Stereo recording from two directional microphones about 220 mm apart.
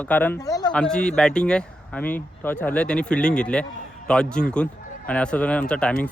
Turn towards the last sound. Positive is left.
turn(degrees=5)  # may be behind; listen again after turning